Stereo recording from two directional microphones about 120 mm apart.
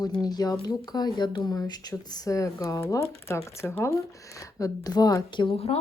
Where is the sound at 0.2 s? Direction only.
35° left (ahead or behind).